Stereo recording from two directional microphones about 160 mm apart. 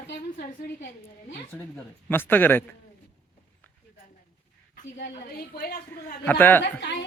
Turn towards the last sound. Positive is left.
turn(degrees=90)